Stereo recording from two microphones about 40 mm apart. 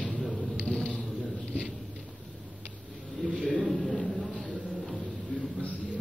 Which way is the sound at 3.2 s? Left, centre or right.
Centre.